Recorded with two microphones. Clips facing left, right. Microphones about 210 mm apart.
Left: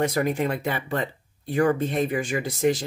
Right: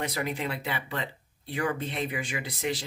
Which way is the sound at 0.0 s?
45° left (ahead or behind).